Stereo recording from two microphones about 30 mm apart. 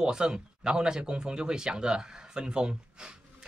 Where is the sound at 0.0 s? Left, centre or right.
Right.